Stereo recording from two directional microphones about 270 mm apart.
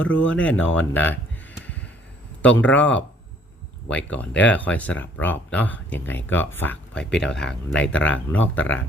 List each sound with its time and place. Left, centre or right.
0.0 s speech: centre
0.6 s a sound: centre
2.4 s speech: centre
7.1 s speech: left
7.3 s speech: centre